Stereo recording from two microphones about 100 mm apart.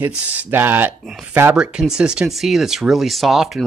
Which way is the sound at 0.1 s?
15° right (ahead or behind).